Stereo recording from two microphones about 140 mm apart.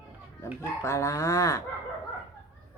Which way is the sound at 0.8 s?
20° left (ahead or behind).